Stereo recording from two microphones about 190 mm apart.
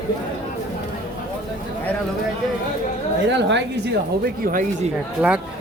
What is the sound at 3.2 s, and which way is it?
Speech, 65° right (ahead or behind).